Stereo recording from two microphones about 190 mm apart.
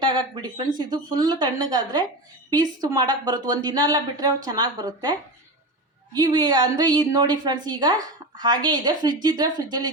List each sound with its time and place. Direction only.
0.0 s a woman's voice: 25° right (ahead or behind)
6.1 s a woman's voice: 20° right (ahead or behind)